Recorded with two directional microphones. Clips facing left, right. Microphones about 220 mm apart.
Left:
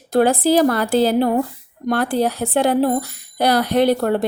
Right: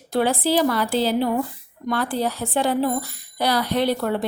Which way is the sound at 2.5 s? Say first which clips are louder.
Left 4 dB; 60° left (ahead or behind).